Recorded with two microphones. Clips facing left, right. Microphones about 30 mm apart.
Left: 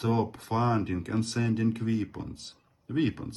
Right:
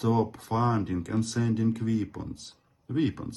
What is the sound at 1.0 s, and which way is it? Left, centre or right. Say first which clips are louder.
Speech: right 1 dB; left.